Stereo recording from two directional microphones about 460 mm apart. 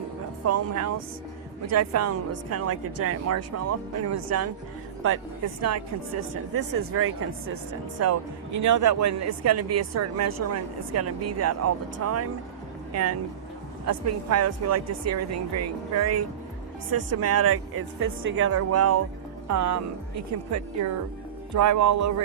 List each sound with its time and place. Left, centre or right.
0.4 s speech: right